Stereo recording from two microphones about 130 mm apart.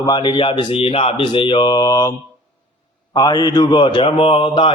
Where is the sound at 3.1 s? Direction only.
30° left (ahead or behind).